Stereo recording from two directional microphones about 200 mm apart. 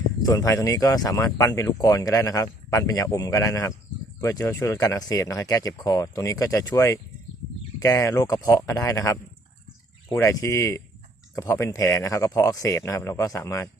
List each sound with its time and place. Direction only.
0.2 s speech: 20° left (ahead or behind)